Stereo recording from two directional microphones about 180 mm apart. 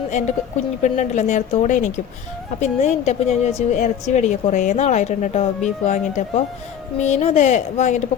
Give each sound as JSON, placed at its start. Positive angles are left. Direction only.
{"t": 0.1, "sound": "a woman's voice", "side_deg": 40}